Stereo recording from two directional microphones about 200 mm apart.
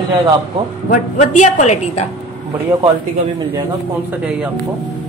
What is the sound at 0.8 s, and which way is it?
A woman's voice, 40° left (ahead or behind).